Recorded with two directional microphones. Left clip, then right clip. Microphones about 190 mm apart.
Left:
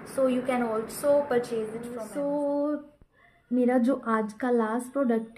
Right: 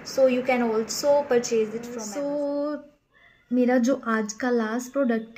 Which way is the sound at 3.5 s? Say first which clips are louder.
Right 3 dB; 35° right (ahead or behind).